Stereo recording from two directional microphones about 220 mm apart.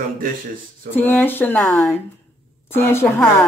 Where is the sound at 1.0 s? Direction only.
10° left (ahead or behind).